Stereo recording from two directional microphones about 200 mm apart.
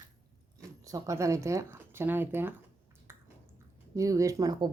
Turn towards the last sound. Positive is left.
turn(degrees=-20)  # may be behind; listen again after turning